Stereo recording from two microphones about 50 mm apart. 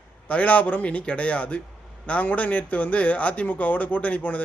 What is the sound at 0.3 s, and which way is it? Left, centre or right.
A man's voice, left.